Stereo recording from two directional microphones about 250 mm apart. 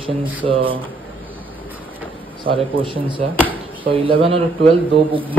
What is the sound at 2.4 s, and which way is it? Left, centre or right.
Speech, right.